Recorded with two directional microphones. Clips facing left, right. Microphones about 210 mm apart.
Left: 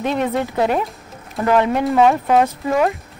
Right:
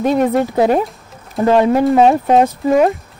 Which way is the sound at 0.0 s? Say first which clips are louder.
Right 6 dB; 45° right (ahead or behind).